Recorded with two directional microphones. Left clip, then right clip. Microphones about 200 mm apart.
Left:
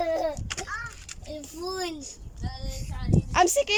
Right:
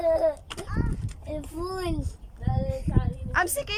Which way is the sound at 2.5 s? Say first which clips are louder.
Right 12 dB; 45° right (ahead or behind).